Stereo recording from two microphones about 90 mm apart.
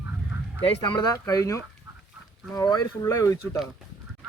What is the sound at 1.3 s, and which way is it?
Speech, 40° left (ahead or behind).